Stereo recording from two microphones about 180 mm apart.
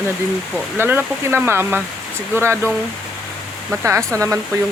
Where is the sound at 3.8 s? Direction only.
15° right (ahead or behind).